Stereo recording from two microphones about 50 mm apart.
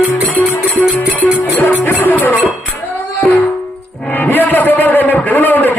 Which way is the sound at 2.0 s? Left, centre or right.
Left.